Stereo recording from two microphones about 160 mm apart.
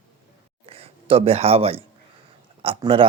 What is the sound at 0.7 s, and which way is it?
Speech, 40° right (ahead or behind).